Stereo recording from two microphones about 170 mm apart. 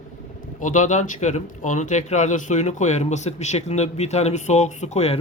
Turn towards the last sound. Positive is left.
turn(degrees=40)  # may be behind; listen again after turning